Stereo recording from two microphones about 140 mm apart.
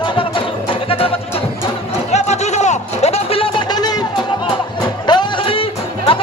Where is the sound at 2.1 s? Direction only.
50° left (ahead or behind).